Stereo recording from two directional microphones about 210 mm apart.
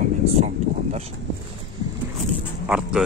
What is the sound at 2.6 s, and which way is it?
Dog, 5° right (ahead or behind).